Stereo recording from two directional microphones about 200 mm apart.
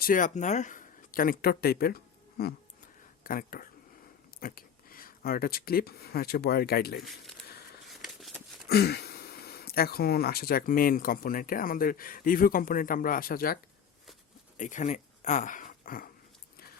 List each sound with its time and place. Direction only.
0.0 s speech: 40° left (ahead or behind)
3.2 s speech: 45° left (ahead or behind)
7.0 s speech: centre (ahead or behind)
7.9 s a sound: centre (ahead or behind)
8.7 s speech: 50° left (ahead or behind)
14.6 s speech: 35° left (ahead or behind)